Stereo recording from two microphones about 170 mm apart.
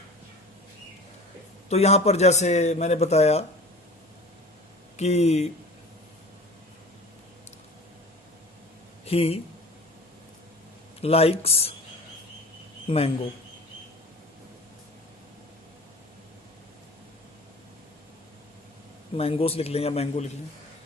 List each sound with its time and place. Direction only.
1.7 s speech: 40° left (ahead or behind)
4.9 s speech: 40° left (ahead or behind)
9.0 s speech: 35° left (ahead or behind)
11.0 s speech: 35° left (ahead or behind)
19.1 s speech: 35° left (ahead or behind)